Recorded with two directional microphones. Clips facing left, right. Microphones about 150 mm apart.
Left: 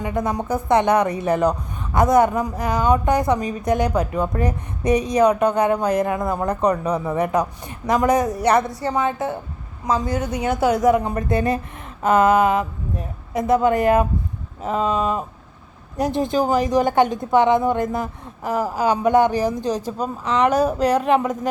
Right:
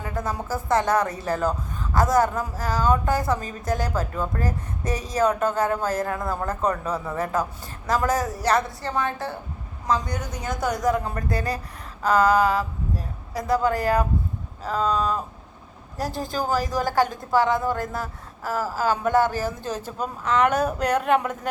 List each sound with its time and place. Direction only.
0.0 s speech: 20° left (ahead or behind)
10.4 s a woman's voice: 60° left (ahead or behind)
10.9 s speech: 20° left (ahead or behind)
20.0 s speech: 5° right (ahead or behind)
20.5 s a woman's voice: 35° left (ahead or behind)
21.0 s speech: centre (ahead or behind)